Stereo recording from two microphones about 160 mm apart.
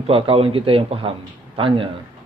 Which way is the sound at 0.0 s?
35° right (ahead or behind).